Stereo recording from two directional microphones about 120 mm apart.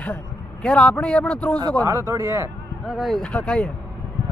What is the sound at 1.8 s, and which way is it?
Speech, 25° right (ahead or behind).